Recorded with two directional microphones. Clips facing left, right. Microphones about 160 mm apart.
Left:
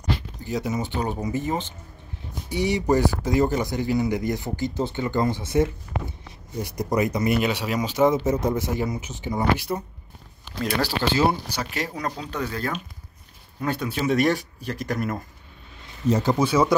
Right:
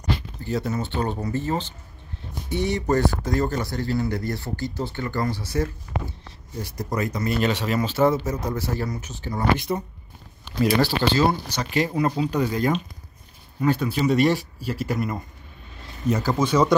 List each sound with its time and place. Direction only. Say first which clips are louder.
0.4 s speech: even; 15° left (ahead or behind)
9.7 s speech: right 2 dB; centre (ahead or behind)
13.6 s speech: right 4 dB; 5° right (ahead or behind)
16.1 s speech: left 2 dB; 25° left (ahead or behind)
16.3 s speech: even; 10° left (ahead or behind)